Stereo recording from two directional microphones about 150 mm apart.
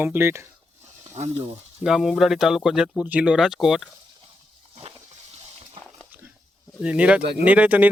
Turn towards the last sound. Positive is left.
turn(degrees=-10)  # may be behind; listen again after turning